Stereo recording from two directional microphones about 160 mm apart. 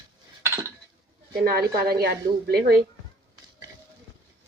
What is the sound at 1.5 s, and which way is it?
A woman's voice, 70° right (ahead or behind).